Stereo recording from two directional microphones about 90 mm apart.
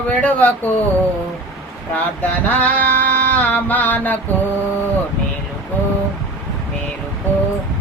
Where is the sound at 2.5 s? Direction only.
20° left (ahead or behind).